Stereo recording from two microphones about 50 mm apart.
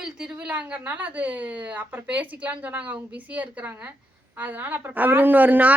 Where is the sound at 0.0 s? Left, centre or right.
Centre.